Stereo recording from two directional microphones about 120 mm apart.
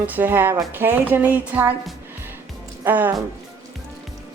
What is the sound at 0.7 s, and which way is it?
Music, 15° right (ahead or behind).